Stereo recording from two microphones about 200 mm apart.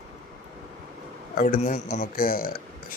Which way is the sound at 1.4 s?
40° left (ahead or behind).